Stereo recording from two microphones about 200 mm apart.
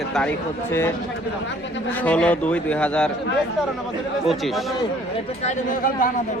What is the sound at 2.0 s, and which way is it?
Speech, 5° left (ahead or behind).